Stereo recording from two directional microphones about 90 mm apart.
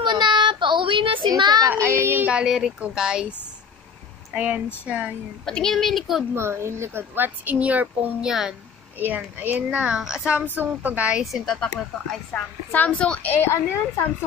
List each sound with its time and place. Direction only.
0.0 s child singing: 60° right (ahead or behind); by 1.3 s 75° right (ahead or behind)
1.4 s a woman's voice: 45° right (ahead or behind)
1.7 s a woman's voice: 20° right (ahead or behind)
2.3 s speech: 5° right (ahead or behind)
5.4 s speech: 5° left (ahead or behind)
6.3 s a woman's voice: 30° right (ahead or behind)
8.3 s speech: 5° right (ahead or behind)
9.0 s speech: 20° right (ahead or behind)
11.4 s speech: 5° left (ahead or behind)
13.3 s a woman's voice: 25° left (ahead or behind)